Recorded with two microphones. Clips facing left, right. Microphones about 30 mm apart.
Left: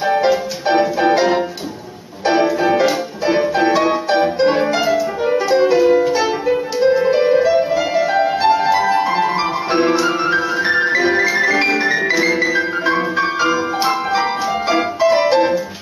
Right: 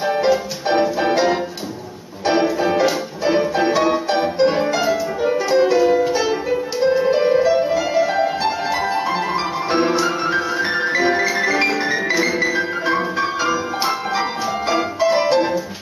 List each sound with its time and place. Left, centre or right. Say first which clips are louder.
0.0 s music: left 2 dB; centre